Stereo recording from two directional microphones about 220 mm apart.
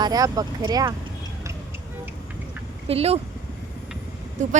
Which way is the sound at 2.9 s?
25° right (ahead or behind).